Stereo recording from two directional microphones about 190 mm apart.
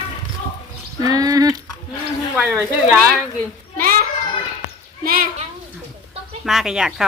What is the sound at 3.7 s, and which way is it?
Children playing, 50° right (ahead or behind).